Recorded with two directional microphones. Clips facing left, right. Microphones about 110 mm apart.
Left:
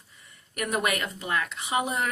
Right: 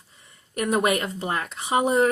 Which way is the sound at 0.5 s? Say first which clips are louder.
Right 6 dB; 30° right (ahead or behind).